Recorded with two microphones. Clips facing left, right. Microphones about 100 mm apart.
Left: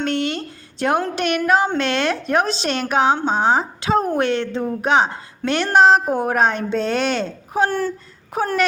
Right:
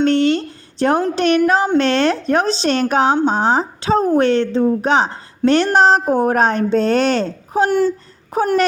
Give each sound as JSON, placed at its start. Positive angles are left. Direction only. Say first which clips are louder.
{"t": 0.0, "sound": "a sound", "louder": "right 8 dB", "side_deg": -30}
{"t": 1.1, "sound": "a woman's voice", "louder": "right 4 dB", "side_deg": -35}
{"t": 7.7, "sound": "speech", "louder": "right 7 dB", "side_deg": -20}
{"t": 8.3, "sound": "a woman's voice", "louder": "right 4 dB", "side_deg": -35}